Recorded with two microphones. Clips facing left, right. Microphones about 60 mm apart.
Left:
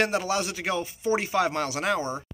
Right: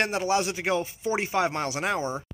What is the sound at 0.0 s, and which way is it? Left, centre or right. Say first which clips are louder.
A man's voice: even; centre.